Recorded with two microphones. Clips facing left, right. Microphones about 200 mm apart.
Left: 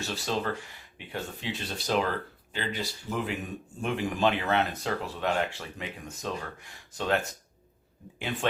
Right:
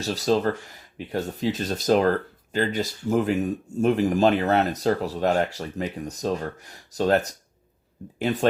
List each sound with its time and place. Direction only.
0.0 s speech: 40° right (ahead or behind)